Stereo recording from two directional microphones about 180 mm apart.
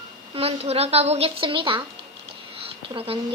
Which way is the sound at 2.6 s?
30° right (ahead or behind).